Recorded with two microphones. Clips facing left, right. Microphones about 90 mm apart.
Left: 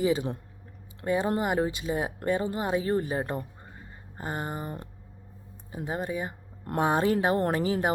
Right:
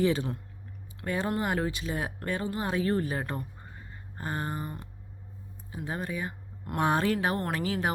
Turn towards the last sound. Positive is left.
turn(degrees=25)  # may be behind; listen again after turning